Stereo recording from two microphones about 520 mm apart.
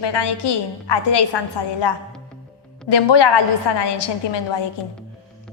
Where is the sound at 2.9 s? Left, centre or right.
Left.